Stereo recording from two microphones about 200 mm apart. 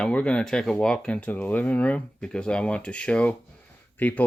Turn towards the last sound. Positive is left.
turn(degrees=10)  # may be behind; listen again after turning